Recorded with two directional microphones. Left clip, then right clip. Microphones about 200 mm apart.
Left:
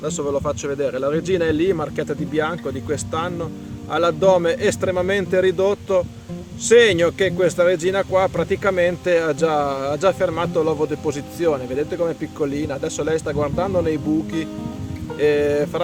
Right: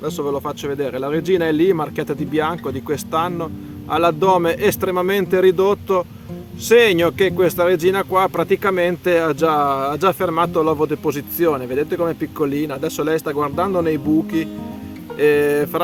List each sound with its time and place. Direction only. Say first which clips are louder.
0.0 s speech: even; 40° right (ahead or behind)